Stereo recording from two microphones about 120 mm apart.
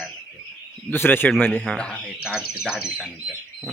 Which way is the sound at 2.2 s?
5° right (ahead or behind).